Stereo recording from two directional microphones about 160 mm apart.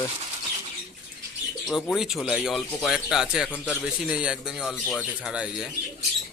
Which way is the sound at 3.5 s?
10° left (ahead or behind).